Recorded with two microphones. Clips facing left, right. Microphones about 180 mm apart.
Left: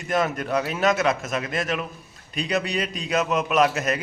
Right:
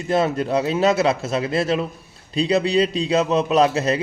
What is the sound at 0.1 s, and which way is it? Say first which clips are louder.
A man's voice: right 4 dB; 30° right (ahead or behind).